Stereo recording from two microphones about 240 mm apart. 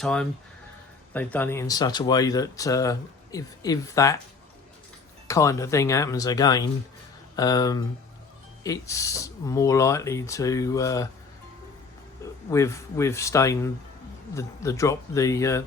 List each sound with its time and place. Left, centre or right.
0.0 s speech: centre
5.3 s speech: centre
12.2 s speech: centre